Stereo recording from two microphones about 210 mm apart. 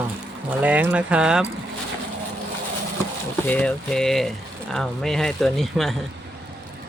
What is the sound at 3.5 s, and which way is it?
Speech, 5° left (ahead or behind).